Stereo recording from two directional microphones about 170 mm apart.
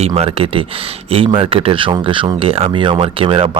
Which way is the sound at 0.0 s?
35° right (ahead or behind).